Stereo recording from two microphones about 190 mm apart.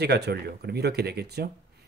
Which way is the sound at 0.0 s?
60° right (ahead or behind).